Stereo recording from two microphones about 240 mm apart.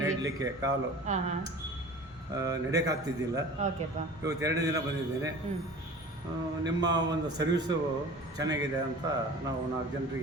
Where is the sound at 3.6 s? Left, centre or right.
Right.